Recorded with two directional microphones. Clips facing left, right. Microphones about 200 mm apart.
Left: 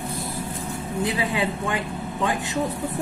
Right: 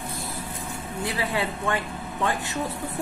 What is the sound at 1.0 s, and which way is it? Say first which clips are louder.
Speech: left 3 dB; 15° left (ahead or behind).